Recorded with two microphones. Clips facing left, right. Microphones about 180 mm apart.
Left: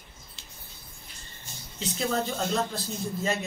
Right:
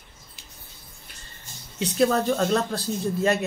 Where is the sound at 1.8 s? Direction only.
65° right (ahead or behind).